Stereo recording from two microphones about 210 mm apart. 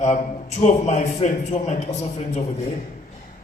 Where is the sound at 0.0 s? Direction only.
30° left (ahead or behind).